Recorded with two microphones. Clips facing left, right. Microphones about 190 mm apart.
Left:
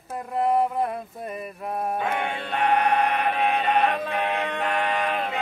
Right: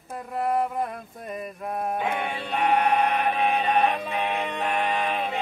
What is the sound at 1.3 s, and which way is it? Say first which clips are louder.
Mantra: right 1 dB; centre (ahead or behind).